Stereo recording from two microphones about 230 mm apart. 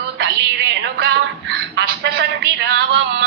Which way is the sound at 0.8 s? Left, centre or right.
Right.